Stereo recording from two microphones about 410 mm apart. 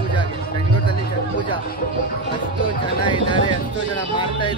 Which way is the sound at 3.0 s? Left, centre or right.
Centre.